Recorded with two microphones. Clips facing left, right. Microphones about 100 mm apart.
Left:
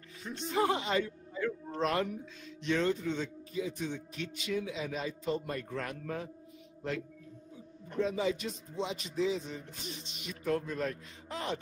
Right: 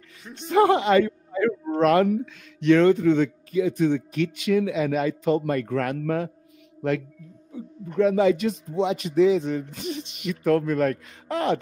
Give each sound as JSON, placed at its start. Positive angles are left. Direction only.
{"t": 0.5, "sound": "speech", "side_deg": -70}